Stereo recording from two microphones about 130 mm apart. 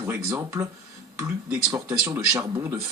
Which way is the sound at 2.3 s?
20° right (ahead or behind).